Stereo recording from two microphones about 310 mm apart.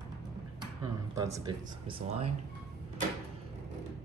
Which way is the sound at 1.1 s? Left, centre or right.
Centre.